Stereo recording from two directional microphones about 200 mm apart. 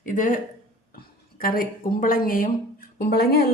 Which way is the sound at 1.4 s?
45° left (ahead or behind).